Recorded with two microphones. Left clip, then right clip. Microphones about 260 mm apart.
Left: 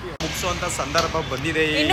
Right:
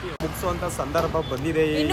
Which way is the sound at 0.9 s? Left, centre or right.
Centre.